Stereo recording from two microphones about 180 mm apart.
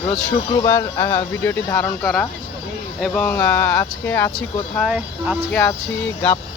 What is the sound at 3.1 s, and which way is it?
Speech, 10° left (ahead or behind).